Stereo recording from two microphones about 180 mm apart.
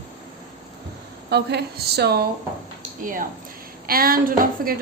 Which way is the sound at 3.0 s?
50° right (ahead or behind).